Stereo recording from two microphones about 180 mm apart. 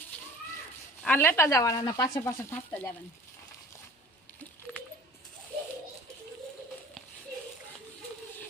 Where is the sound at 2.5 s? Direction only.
10° left (ahead or behind).